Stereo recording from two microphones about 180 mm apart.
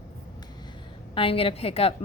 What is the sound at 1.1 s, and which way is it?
Speech, 30° left (ahead or behind).